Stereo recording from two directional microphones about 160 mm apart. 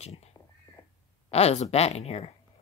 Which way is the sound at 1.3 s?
40° left (ahead or behind).